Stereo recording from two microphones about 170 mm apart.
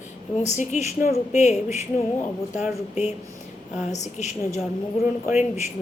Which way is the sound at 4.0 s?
45° left (ahead or behind).